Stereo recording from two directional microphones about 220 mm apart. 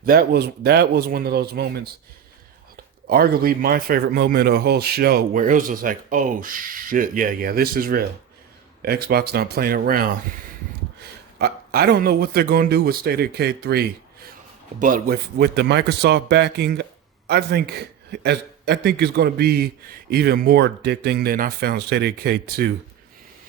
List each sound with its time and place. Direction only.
0.0 s a man's voice: 45° right (ahead or behind)
3.1 s a man's voice: 40° right (ahead or behind)
11.3 s a man's voice: 45° right (ahead or behind)